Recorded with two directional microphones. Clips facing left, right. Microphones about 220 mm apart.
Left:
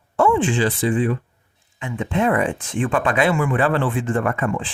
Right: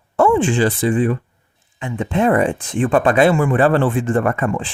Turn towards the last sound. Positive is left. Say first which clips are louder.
# right 3 dB
turn(degrees=-40)  # may be behind; listen again after turning